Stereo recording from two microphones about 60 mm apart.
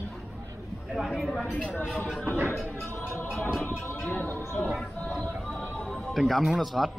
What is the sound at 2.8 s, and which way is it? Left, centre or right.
Music, left.